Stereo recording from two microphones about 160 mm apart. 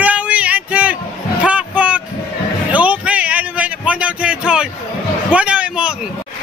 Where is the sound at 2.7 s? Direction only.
10° right (ahead or behind).